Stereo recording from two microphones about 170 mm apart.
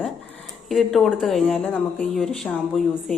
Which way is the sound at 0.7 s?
Centre (ahead or behind).